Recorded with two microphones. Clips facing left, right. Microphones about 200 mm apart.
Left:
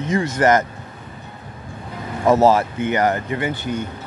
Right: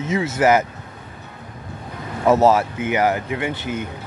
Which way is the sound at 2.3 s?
Centre (ahead or behind).